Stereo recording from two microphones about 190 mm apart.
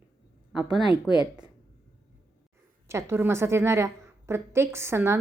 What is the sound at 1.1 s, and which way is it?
Speech, centre (ahead or behind).